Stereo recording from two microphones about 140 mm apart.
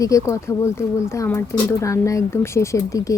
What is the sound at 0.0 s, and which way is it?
Speech, 25° left (ahead or behind).